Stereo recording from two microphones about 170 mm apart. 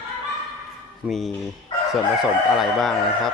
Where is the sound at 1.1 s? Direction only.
Centre (ahead or behind).